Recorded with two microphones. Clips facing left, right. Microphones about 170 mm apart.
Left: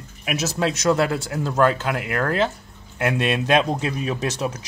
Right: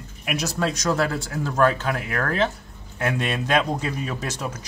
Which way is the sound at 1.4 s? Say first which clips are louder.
Left 1 dB; 15° left (ahead or behind).